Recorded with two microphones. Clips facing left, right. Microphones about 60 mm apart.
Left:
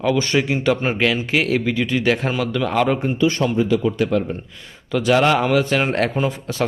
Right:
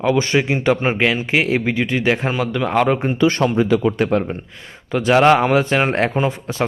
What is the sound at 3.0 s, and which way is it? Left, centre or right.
Speech, right.